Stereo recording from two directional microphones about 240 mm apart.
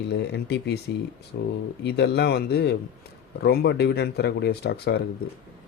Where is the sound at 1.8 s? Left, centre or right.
Left.